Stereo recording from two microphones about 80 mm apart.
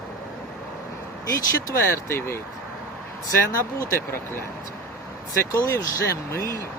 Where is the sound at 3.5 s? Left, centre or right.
Left.